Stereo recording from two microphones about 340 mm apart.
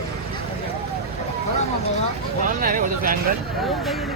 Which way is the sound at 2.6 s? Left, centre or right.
Right.